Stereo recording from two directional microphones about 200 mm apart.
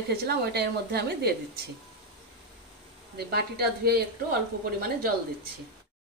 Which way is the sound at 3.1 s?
50° right (ahead or behind).